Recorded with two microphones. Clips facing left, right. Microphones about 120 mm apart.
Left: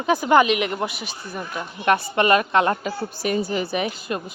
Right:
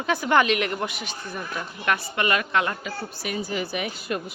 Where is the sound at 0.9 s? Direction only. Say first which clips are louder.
Left 1 dB; 5° left (ahead or behind).